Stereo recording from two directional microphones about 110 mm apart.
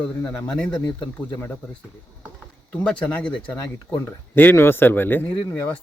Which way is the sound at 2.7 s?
10° left (ahead or behind).